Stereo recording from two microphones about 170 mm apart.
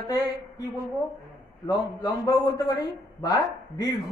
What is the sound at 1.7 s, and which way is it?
Speech, 20° left (ahead or behind).